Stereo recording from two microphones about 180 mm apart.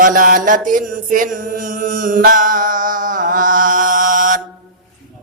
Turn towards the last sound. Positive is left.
turn(degrees=-45)  # may be behind; listen again after turning